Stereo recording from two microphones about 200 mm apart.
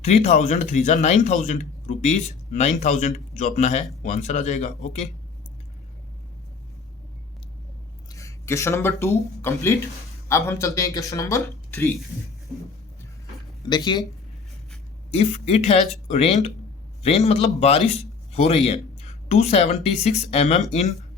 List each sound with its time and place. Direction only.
0.0 s speech: 35° left (ahead or behind)
8.1 s speech: 15° left (ahead or behind)
13.7 s speech: 20° left (ahead or behind)
15.1 s speech: 35° left (ahead or behind)